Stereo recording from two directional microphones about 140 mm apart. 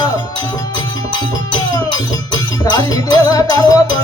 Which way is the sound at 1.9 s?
30° left (ahead or behind).